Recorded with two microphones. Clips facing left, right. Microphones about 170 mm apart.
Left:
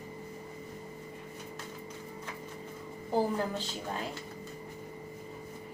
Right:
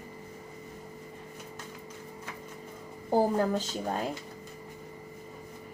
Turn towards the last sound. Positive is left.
turn(degrees=-40)  # may be behind; listen again after turning